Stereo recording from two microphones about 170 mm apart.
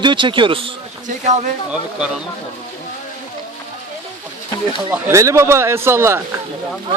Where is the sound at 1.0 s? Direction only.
45° right (ahead or behind).